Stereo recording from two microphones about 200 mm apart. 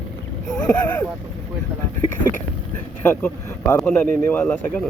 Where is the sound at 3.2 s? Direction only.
10° left (ahead or behind).